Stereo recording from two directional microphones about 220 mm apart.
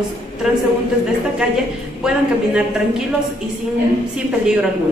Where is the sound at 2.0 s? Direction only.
5° right (ahead or behind).